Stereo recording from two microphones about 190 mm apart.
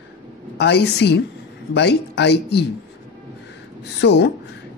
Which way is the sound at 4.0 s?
65° left (ahead or behind).